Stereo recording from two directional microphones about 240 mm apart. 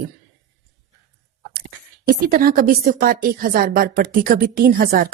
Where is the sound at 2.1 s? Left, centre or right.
Right.